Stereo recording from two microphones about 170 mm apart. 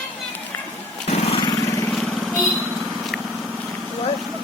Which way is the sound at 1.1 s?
35° left (ahead or behind).